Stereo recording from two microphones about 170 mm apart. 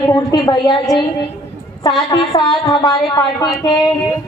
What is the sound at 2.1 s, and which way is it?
A woman's voice, 25° left (ahead or behind).